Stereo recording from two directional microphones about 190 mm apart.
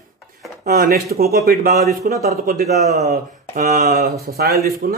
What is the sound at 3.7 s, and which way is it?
Speech, 55° right (ahead or behind).